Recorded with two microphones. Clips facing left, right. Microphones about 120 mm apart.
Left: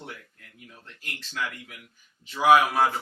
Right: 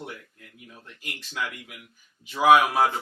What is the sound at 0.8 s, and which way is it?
Speech, 15° right (ahead or behind).